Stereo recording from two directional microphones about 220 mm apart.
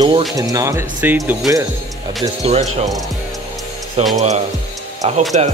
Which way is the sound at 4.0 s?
30° right (ahead or behind).